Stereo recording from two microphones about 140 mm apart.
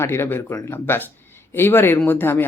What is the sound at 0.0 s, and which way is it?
Speech, 15° left (ahead or behind).